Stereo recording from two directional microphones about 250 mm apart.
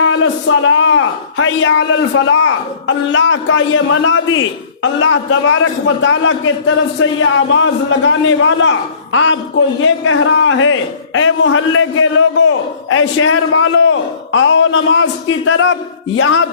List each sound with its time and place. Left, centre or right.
0.6 s a man's voice: left